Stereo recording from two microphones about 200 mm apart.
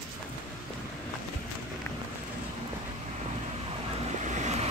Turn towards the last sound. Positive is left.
turn(degrees=-35)  # may be behind; listen again after turning